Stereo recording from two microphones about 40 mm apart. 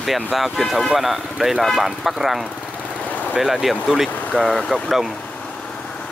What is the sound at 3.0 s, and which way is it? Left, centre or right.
Vehicle, left.